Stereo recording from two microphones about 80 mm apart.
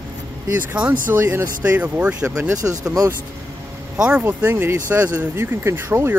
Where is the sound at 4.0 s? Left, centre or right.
Centre.